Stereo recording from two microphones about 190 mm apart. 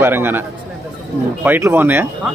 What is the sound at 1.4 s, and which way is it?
Speech, 10° right (ahead or behind).